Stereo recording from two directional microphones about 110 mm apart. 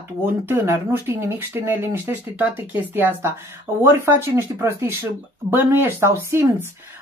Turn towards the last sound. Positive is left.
turn(degrees=-25)  # may be behind; listen again after turning